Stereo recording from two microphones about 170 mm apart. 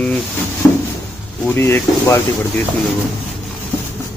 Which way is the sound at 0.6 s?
10° left (ahead or behind).